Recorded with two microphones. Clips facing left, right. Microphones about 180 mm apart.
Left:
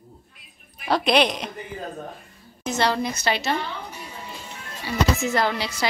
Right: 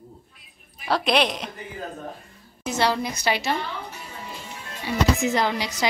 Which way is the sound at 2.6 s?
10° right (ahead or behind).